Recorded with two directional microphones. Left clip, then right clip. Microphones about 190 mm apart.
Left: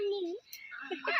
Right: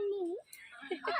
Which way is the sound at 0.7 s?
35° left (ahead or behind).